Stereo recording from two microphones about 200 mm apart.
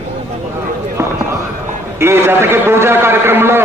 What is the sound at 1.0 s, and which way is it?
Fireworks, 15° right (ahead or behind).